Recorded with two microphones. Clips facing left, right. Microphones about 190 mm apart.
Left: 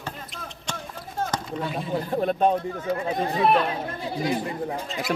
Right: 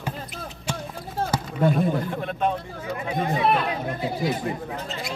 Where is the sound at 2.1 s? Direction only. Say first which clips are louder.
Left 4 dB; 35° left (ahead or behind).